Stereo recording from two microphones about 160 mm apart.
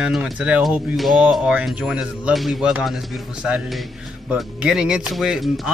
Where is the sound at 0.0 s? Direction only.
5° right (ahead or behind).